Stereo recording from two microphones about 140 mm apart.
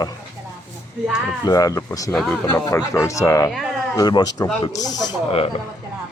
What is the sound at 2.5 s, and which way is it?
Speech, 20° left (ahead or behind).